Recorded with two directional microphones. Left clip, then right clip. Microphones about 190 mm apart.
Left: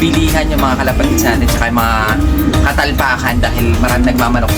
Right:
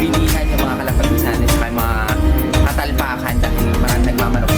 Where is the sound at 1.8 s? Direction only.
15° right (ahead or behind).